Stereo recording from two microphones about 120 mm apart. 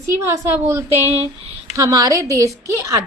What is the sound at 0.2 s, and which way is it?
A woman's voice, 20° right (ahead or behind).